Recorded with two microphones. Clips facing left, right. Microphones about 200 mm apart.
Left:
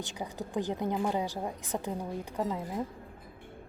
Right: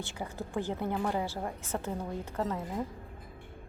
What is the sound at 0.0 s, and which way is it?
Speech, 15° left (ahead or behind).